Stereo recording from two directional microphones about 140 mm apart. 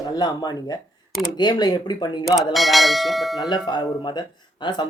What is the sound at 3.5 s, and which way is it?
Speech, 30° left (ahead or behind).